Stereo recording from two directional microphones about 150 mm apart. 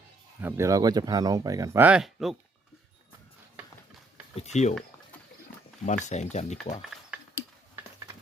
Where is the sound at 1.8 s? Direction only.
5° right (ahead or behind).